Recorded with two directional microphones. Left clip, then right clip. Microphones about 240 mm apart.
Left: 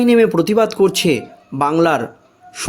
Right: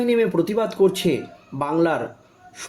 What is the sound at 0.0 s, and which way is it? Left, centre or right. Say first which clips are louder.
Speech: left 7 dB; left.